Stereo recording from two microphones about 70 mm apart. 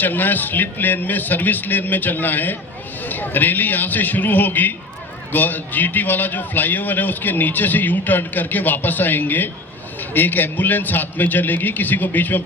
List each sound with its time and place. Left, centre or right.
0.0 s a man's voice: left